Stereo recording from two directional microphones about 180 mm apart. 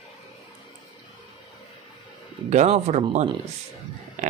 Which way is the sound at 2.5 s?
40° right (ahead or behind).